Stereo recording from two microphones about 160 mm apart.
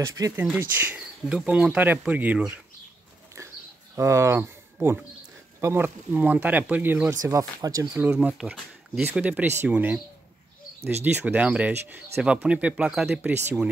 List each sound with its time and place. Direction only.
0.0 s speech: 20° right (ahead or behind)
3.9 s speech: 20° right (ahead or behind)
8.0 s speech: 10° right (ahead or behind)
11.1 s speech: 10° right (ahead or behind)